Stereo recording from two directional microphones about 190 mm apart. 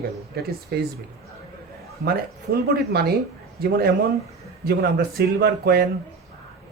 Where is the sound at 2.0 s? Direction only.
55° right (ahead or behind).